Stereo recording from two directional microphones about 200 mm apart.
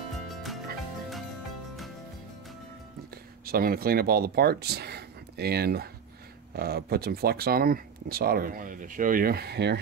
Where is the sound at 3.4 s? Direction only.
50° right (ahead or behind).